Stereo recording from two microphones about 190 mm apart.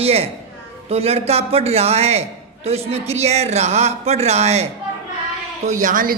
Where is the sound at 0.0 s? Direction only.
30° right (ahead or behind).